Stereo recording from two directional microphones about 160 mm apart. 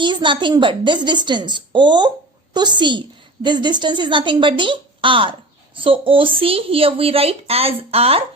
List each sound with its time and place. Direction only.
0.0 s a woman's voice: 30° right (ahead or behind)